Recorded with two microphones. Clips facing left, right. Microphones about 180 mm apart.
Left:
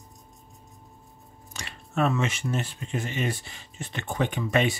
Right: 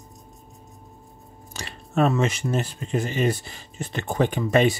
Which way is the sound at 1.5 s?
35° right (ahead or behind).